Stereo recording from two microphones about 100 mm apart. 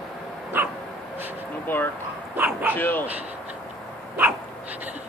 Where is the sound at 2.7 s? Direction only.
20° left (ahead or behind).